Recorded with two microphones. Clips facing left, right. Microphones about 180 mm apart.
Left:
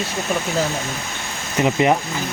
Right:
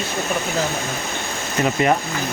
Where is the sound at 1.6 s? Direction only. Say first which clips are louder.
Left 2 dB; 20° left (ahead or behind).